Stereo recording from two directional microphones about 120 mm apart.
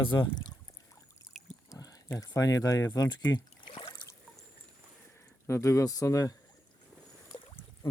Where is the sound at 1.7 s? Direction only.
30° left (ahead or behind).